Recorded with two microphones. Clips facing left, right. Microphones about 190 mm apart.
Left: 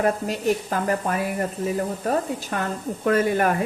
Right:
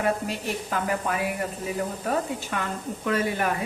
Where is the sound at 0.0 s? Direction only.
45° left (ahead or behind).